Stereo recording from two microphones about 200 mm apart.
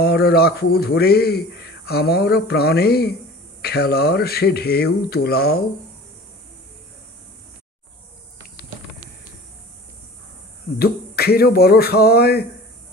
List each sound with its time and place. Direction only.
0.0 s a man's voice: 50° left (ahead or behind)
10.8 s a man's voice: 50° left (ahead or behind)